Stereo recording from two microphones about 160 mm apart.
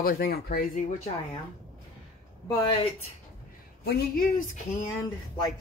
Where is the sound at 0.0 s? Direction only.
70° left (ahead or behind).